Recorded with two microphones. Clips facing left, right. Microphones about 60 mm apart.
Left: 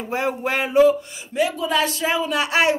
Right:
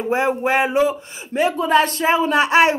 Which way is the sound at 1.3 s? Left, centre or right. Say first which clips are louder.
Right 5 dB; right.